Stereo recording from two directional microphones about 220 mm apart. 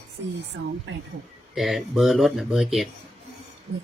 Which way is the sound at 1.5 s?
Centre (ahead or behind).